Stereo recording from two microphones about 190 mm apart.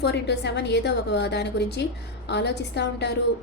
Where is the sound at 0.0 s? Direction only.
60° left (ahead or behind).